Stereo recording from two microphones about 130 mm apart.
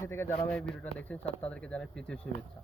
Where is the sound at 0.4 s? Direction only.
5° left (ahead or behind).